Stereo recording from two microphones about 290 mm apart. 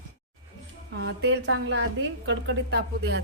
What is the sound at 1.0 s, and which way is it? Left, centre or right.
A woman's voice, right.